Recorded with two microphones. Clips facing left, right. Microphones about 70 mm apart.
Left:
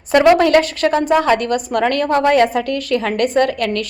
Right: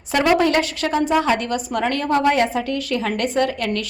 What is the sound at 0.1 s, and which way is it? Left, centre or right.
A woman's voice, left.